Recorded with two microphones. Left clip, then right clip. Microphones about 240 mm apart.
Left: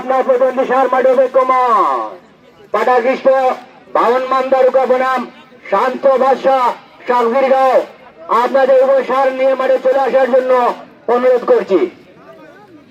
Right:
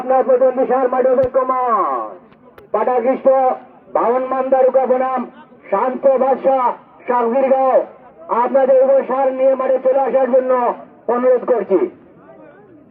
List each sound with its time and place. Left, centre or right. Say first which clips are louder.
0.1 s a man's voice: left 1 dB; left